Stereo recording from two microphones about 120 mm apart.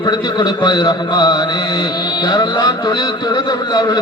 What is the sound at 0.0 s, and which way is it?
A man's voice, 35° left (ahead or behind).